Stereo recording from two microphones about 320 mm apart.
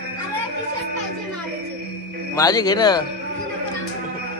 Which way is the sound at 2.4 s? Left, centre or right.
Centre.